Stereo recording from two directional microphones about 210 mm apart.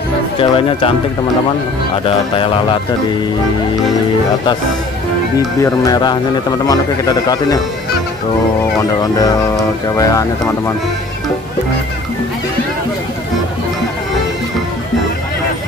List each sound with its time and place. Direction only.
0.4 s speech: 25° left (ahead or behind)
2.3 s speech: 25° left (ahead or behind)
5.6 s a man's voice: 20° left (ahead or behind)
9.0 s a man's voice: 20° left (ahead or behind)